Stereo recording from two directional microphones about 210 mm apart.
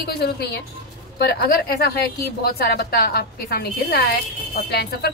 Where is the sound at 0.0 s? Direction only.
50° left (ahead or behind).